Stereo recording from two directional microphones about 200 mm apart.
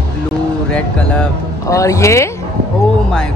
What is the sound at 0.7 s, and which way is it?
Speech, 5° left (ahead or behind).